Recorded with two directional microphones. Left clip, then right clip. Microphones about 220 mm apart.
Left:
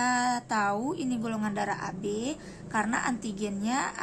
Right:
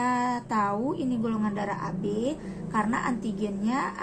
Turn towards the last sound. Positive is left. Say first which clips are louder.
# right 1 dB
turn(degrees=25)  # may be behind; listen again after turning